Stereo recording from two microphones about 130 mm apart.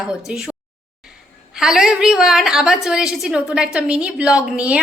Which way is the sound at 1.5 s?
5° right (ahead or behind).